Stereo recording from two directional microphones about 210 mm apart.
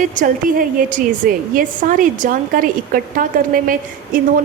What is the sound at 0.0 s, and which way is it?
A woman's voice, 40° right (ahead or behind).